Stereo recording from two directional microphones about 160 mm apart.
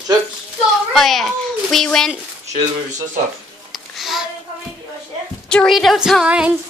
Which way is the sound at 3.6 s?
Centre (ahead or behind).